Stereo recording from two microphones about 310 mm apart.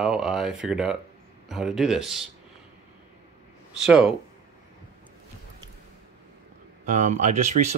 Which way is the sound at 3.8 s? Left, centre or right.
Centre.